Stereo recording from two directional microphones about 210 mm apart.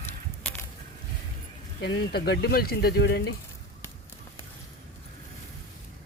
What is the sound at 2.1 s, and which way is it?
Speech, 50° left (ahead or behind).